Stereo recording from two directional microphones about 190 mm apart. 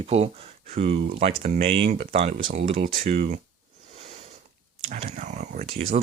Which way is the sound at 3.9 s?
35° right (ahead or behind).